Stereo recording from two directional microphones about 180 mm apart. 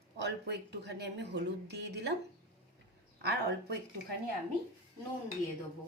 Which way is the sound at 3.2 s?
65° right (ahead or behind).